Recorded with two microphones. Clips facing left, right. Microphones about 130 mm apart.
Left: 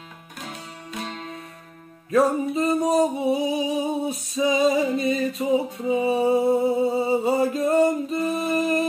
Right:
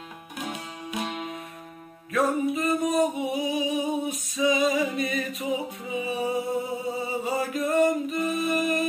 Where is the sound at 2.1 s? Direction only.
30° left (ahead or behind).